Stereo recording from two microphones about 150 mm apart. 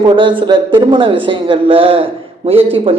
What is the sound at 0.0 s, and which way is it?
Speech, 35° right (ahead or behind).